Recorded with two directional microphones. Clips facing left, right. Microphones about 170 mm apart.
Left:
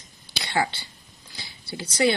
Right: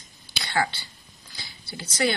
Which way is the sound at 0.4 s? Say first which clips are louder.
Left 1 dB; 25° left (ahead or behind).